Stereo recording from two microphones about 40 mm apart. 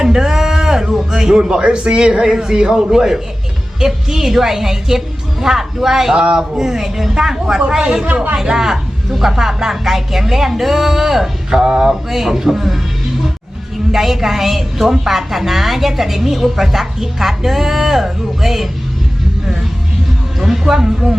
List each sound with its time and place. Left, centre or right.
0.0 s a sound: centre
1.1 s a man's voice: centre
8.0 s speech: right
8.4 s a woman's voice: centre
13.9 s a woman's voice: centre
20.4 s speech: centre